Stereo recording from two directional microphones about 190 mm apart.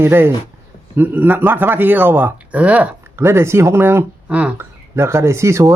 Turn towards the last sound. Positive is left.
turn(degrees=-15)  # may be behind; listen again after turning